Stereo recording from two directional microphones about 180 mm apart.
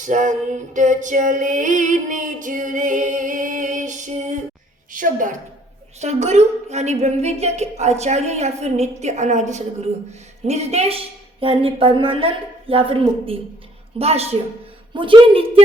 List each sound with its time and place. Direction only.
0.0 s female singing: 45° right (ahead or behind)
4.9 s a woman's voice: 45° right (ahead or behind); by 15.6 s 30° right (ahead or behind)